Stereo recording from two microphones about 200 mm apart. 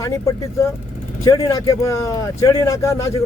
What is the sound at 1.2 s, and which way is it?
Speech, 20° left (ahead or behind).